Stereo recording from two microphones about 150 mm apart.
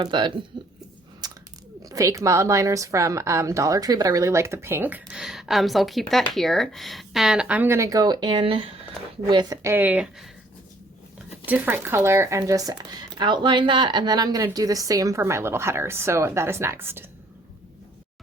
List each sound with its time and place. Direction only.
0.0 s speech: 30° right (ahead or behind)
1.2 s a sound: 25° right (ahead or behind)
1.8 s a woman's voice: 20° right (ahead or behind)
9.2 s a woman's voice: 25° right (ahead or behind)
9.7 s speech: 10° right (ahead or behind)
11.4 s a woman's voice: 10° right (ahead or behind)